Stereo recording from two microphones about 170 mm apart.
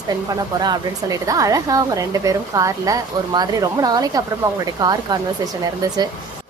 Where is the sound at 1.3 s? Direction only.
20° right (ahead or behind).